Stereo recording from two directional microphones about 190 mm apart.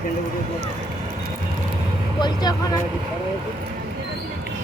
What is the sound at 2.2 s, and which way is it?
Speech, 20° left (ahead or behind).